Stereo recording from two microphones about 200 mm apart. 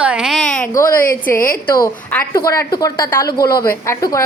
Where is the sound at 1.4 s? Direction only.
45° left (ahead or behind).